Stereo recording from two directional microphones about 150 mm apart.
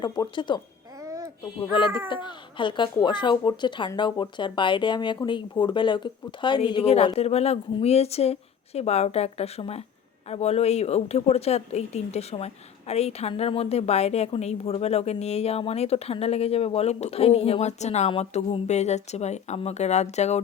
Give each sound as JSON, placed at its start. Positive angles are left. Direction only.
{"t": 0.0, "sound": "speech", "side_deg": 30}
{"t": 0.9, "sound": "music", "side_deg": -20}
{"t": 2.2, "sound": "a woman's voice", "side_deg": 30}